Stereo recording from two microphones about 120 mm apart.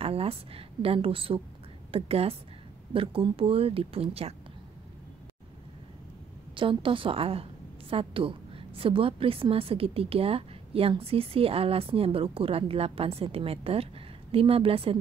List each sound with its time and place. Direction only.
0.0 s a woman's voice: 55° right (ahead or behind)
6.5 s a woman's voice: 45° right (ahead or behind)